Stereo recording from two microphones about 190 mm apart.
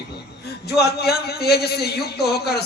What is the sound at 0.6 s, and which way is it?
A man's voice, 55° left (ahead or behind).